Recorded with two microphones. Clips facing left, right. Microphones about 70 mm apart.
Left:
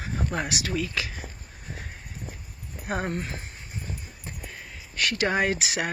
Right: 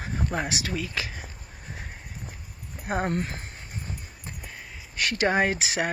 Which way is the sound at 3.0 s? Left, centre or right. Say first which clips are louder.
Right 3 dB; right.